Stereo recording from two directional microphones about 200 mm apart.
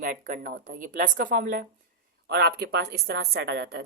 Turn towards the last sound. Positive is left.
turn(degrees=-55)  # may be behind; listen again after turning